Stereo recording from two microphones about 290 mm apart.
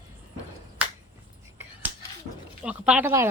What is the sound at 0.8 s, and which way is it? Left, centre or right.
Finger snapping, centre.